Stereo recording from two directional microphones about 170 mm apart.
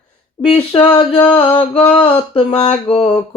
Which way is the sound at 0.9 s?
35° left (ahead or behind).